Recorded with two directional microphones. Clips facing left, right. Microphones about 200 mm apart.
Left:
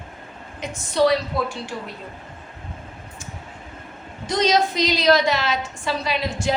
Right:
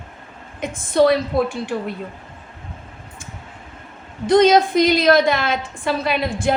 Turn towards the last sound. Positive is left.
turn(degrees=-55)  # may be behind; listen again after turning